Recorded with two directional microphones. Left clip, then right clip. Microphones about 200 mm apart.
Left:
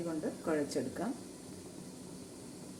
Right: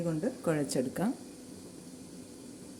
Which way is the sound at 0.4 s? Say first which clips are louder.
Right 3 dB; 55° right (ahead or behind).